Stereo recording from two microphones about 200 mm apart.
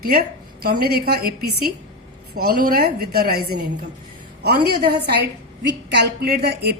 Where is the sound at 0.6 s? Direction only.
50° right (ahead or behind).